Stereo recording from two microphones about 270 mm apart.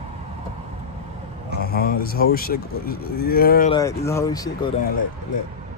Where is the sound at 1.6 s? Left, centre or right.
Left.